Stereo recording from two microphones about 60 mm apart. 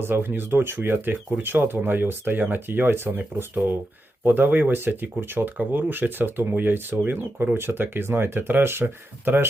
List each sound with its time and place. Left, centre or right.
0.0 s speech: right